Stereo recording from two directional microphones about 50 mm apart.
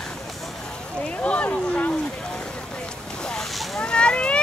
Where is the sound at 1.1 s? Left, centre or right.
Left.